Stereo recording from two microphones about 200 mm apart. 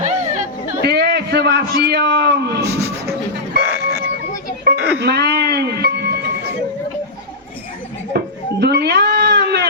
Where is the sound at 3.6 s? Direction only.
5° right (ahead or behind).